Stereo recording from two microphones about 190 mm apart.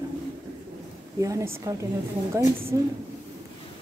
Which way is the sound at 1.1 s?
15° right (ahead or behind).